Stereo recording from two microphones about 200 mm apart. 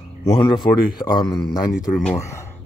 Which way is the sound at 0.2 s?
20° left (ahead or behind).